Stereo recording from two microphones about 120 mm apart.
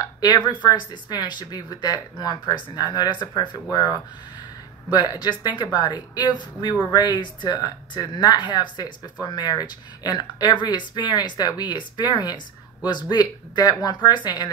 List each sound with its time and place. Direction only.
0.0 s speech: 35° left (ahead or behind)